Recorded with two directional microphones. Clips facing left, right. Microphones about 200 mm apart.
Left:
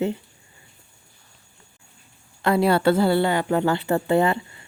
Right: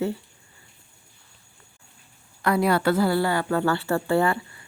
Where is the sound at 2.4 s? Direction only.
25° left (ahead or behind).